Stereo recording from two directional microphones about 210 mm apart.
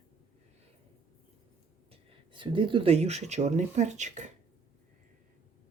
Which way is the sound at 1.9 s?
25° right (ahead or behind).